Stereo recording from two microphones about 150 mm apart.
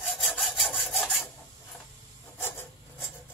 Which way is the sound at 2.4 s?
15° left (ahead or behind).